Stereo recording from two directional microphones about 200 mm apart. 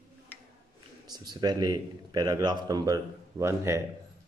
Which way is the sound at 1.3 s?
20° right (ahead or behind).